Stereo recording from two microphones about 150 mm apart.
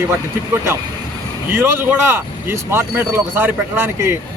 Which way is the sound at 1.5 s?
15° right (ahead or behind).